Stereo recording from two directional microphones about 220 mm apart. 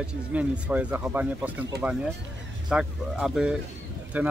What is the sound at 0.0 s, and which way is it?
Speech, 5° right (ahead or behind).